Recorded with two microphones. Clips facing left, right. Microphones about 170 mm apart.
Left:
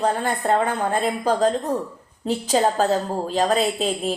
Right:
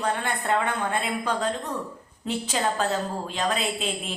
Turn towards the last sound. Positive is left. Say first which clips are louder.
# left 7 dB
turn(degrees=40)  # may be behind; listen again after turning